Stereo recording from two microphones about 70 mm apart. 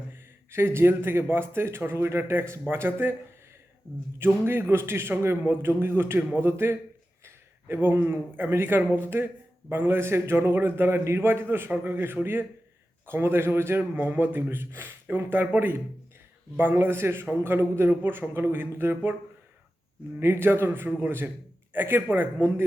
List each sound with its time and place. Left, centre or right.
0.1 s speech: right
4.4 s speech: right
20.1 s speech: right